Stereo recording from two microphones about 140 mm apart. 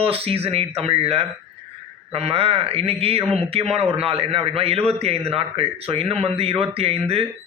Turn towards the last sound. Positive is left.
turn(degrees=-45)  # may be behind; listen again after turning